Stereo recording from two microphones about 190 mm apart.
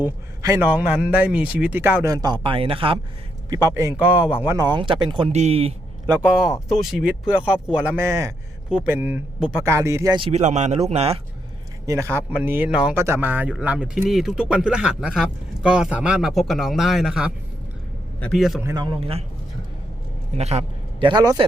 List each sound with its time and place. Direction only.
0.0 s a man's voice: 15° right (ahead or behind); by 3.0 s 30° right (ahead or behind)
3.5 s speech: 20° right (ahead or behind)
4.4 s speech: 20° right (ahead or behind)
6.2 s speech: centre (ahead or behind); by 11.2 s 35° right (ahead or behind)
11.9 s speech: 15° right (ahead or behind)
18.6 s speech: 20° right (ahead or behind)
20.3 s a man's voice: 35° right (ahead or behind)